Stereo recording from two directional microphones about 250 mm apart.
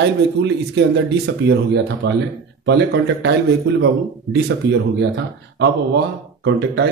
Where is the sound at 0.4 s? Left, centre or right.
Right.